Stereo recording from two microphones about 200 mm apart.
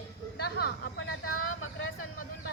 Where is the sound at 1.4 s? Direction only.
90° left.